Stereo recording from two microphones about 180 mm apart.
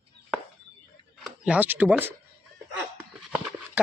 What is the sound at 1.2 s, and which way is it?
Speech, 5° right (ahead or behind).